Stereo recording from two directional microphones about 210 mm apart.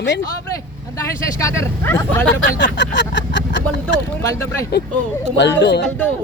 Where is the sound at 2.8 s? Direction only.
60° left (ahead or behind).